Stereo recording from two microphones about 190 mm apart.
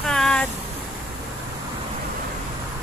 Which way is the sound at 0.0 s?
5° left (ahead or behind).